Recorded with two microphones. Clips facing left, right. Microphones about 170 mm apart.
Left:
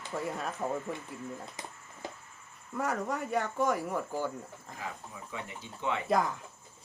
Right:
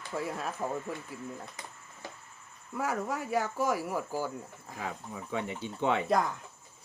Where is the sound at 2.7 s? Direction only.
5° right (ahead or behind).